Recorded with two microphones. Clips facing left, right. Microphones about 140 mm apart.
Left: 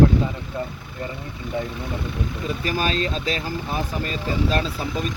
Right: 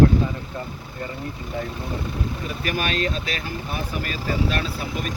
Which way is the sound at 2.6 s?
30° left (ahead or behind).